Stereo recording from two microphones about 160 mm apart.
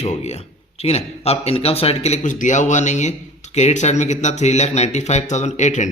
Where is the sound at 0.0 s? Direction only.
45° left (ahead or behind).